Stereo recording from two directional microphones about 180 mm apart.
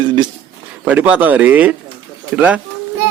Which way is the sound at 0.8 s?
10° right (ahead or behind).